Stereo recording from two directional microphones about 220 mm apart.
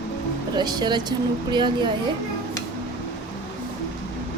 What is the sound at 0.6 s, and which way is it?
A woman's voice, 20° right (ahead or behind).